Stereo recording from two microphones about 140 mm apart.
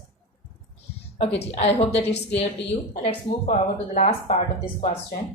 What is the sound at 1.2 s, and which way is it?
Speech, 50° left (ahead or behind).